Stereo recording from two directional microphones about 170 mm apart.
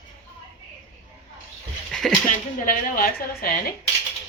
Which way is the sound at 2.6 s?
55° left (ahead or behind).